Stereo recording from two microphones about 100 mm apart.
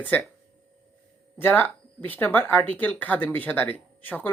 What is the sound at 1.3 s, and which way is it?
Speech, 20° left (ahead or behind).